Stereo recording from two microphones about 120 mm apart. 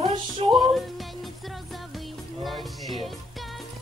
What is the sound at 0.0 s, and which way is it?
Music, 45° right (ahead or behind).